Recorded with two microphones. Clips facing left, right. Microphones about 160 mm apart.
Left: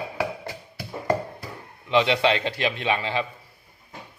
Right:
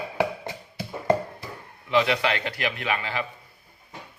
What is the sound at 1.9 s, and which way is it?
A man's voice, 25° left (ahead or behind).